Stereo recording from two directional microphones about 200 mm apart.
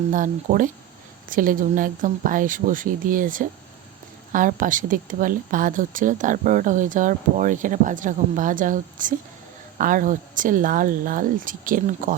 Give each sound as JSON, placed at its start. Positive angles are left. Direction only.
{"t": 0.1, "sound": "speech", "side_deg": -40}